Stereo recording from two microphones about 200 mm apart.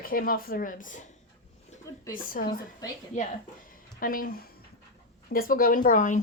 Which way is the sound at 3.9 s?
45° left (ahead or behind).